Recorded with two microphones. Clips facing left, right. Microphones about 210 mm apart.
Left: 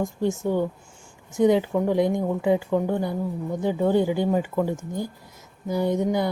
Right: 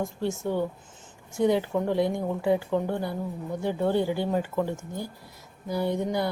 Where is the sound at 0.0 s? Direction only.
15° left (ahead or behind).